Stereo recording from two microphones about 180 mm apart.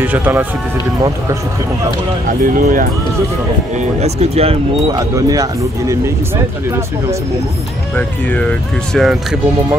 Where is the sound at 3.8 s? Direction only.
35° right (ahead or behind).